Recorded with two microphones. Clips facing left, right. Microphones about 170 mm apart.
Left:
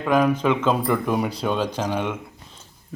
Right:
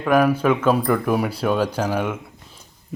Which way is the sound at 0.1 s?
10° right (ahead or behind).